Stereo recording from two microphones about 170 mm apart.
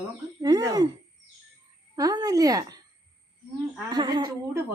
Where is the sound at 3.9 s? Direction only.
25° right (ahead or behind).